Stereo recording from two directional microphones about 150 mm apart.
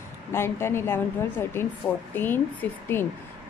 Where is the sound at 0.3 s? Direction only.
15° left (ahead or behind).